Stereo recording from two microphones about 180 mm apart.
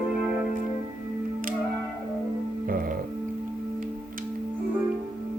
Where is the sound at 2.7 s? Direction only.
55° right (ahead or behind).